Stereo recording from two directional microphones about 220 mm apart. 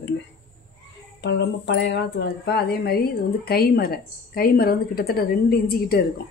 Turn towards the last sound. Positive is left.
turn(degrees=45)  # may be behind; listen again after turning